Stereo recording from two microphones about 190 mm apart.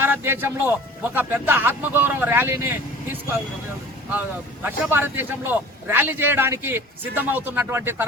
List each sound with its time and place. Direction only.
0.0 s music: 10° right (ahead or behind)
1.1 s speech: 10° right (ahead or behind)